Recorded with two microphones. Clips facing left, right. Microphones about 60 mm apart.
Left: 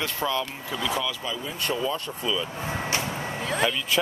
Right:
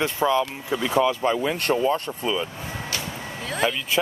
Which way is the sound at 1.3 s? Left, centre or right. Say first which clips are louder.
Right 7 dB; right.